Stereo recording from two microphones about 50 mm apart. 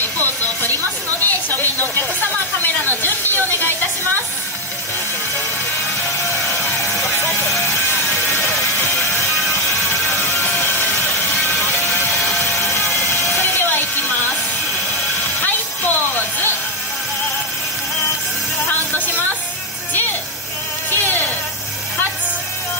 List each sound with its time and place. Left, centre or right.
0.0 s music: left
1.2 s a sound: left
7.9 s music: left
10.2 s music: left
11.4 s vehicle: left
15.4 s music: left
18.9 s music: left